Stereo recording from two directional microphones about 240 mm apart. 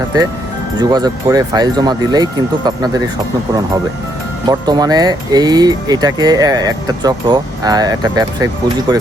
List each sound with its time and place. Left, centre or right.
0.8 s speech: centre
4.4 s speech: centre